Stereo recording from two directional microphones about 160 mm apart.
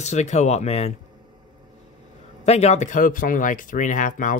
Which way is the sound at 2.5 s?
45° left (ahead or behind).